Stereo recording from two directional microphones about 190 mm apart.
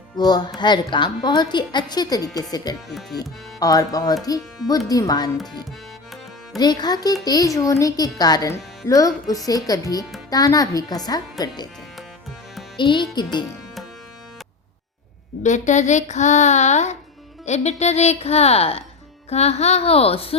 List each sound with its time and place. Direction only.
0.2 s speech: 20° left (ahead or behind)
6.6 s speech: 20° left (ahead or behind)
12.7 s speech: 25° left (ahead or behind)
15.4 s speech: 40° left (ahead or behind)